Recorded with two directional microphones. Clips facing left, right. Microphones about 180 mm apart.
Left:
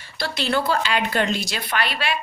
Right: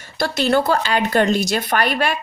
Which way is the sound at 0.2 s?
45° right (ahead or behind).